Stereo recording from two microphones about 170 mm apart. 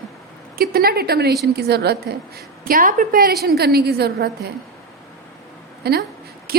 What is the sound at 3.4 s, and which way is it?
A woman's voice, 70° right (ahead or behind).